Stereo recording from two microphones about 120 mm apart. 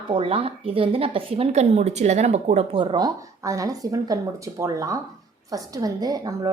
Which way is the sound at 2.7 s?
40° right (ahead or behind).